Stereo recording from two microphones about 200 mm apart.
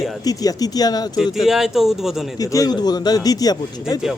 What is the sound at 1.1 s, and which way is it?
Speech, centre (ahead or behind).